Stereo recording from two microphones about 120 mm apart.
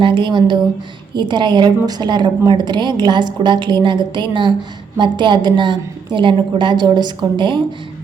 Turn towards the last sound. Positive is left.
turn(degrees=-40)  # may be behind; listen again after turning